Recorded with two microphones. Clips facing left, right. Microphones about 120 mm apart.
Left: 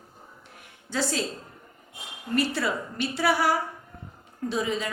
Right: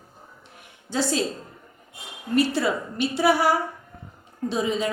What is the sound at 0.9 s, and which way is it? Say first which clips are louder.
Speech: right 4 dB; 20° right (ahead or behind).